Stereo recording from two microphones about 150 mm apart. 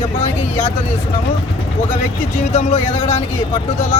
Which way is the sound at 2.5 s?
45° left (ahead or behind).